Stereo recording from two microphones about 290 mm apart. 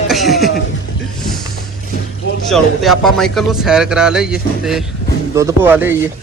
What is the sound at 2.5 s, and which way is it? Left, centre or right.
Speech, centre.